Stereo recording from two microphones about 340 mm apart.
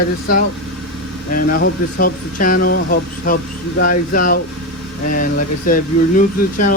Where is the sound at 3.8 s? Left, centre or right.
Left.